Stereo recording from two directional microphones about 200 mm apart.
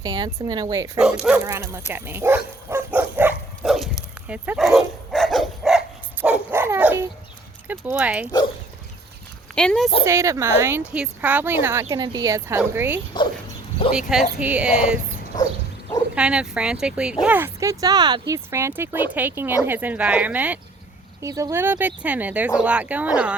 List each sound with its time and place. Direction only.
0.0 s speech: 20° right (ahead or behind)
0.9 s speech: 5° right (ahead or behind)
2.6 s dog: 10° right (ahead or behind)
7.7 s speech: 10° right (ahead or behind)
9.6 s speech: 5° left (ahead or behind)
10.1 s speech: 15° right (ahead or behind)
16.1 s speech: 5° right (ahead or behind)